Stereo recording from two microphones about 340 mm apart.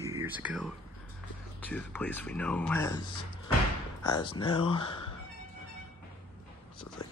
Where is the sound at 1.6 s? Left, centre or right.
Centre.